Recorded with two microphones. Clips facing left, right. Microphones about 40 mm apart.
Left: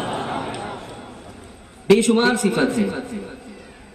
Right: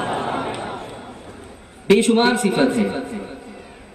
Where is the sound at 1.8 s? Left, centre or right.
Right.